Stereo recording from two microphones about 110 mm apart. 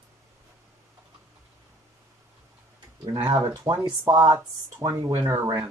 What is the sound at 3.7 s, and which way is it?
Speech, 40° right (ahead or behind).